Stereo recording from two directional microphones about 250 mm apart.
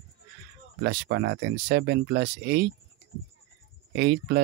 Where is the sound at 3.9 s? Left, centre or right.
Right.